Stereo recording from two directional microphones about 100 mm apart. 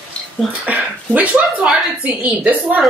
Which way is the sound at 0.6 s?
15° right (ahead or behind).